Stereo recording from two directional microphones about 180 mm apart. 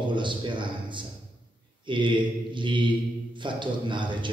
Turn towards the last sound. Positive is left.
turn(degrees=-25)  # may be behind; listen again after turning